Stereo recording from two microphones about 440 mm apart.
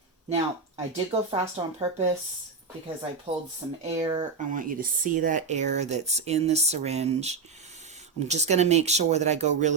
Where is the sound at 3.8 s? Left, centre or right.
Centre.